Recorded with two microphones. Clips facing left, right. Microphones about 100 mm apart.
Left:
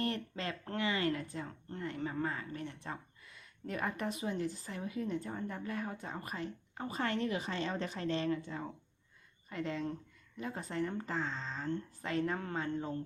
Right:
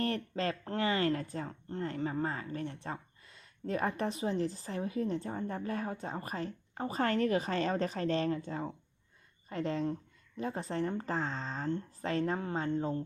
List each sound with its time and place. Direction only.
0.0 s speech: 40° right (ahead or behind)